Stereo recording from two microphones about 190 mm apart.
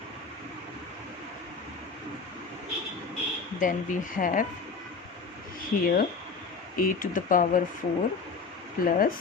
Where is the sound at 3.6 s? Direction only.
45° left (ahead or behind).